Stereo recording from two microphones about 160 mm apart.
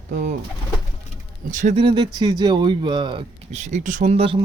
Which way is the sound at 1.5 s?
50° right (ahead or behind).